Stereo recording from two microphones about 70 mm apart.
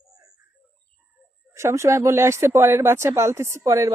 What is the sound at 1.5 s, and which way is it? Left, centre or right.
Speech, right.